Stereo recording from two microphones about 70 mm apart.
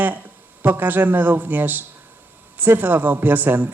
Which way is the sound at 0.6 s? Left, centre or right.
Right.